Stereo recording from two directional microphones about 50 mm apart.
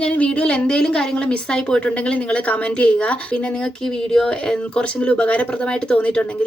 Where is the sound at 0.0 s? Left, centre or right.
Left.